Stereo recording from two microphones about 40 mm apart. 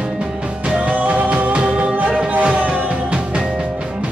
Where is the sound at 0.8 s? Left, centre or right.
Right.